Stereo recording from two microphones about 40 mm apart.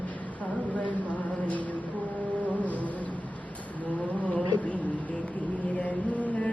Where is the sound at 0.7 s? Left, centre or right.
Left.